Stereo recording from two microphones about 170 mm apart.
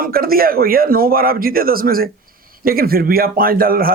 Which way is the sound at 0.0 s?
60° right (ahead or behind).